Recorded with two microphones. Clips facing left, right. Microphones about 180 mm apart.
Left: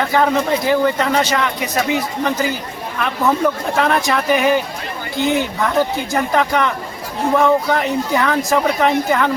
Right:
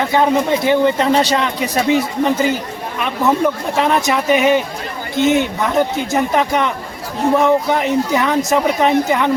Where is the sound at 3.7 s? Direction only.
20° right (ahead or behind).